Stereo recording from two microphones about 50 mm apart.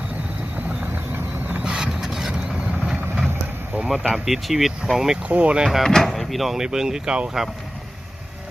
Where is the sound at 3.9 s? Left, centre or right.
Centre.